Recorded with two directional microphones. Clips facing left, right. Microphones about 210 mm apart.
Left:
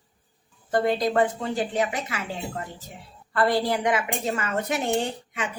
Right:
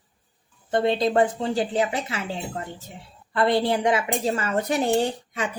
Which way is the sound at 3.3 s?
20° right (ahead or behind).